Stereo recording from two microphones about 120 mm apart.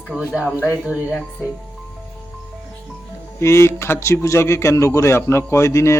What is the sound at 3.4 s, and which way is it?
A man's voice, 25° left (ahead or behind).